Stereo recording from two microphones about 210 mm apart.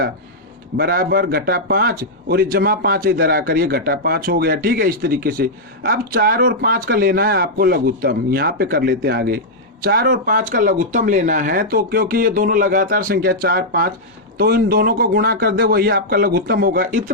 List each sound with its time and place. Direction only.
0.8 s a man's voice: 45° right (ahead or behind)